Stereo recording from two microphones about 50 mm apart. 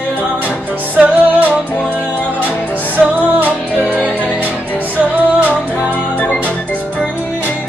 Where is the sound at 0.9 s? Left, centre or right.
Right.